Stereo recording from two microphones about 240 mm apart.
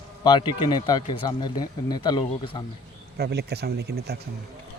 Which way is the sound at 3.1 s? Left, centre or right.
Right.